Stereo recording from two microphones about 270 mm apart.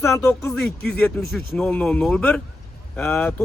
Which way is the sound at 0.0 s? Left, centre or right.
Centre.